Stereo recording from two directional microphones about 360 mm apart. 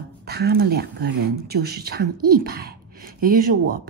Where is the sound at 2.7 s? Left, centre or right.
Right.